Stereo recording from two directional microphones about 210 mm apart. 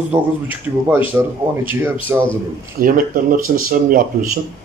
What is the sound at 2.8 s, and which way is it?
Speech, 40° right (ahead or behind).